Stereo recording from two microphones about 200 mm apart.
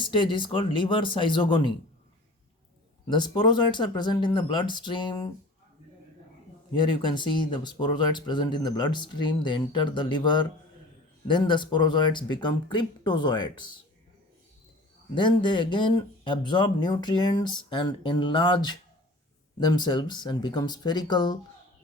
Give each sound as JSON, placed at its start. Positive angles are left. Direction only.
{"t": 0.0, "sound": "speech", "side_deg": 25}
{"t": 3.1, "sound": "speech", "side_deg": 20}
{"t": 6.7, "sound": "speech", "side_deg": 25}
{"t": 15.1, "sound": "speech", "side_deg": 25}